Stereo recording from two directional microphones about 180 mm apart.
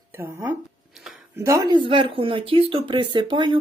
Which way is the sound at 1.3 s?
15° right (ahead or behind).